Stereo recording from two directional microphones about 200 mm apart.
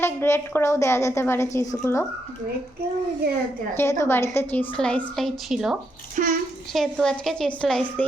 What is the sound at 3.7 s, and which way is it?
A woman's voice, 15° left (ahead or behind).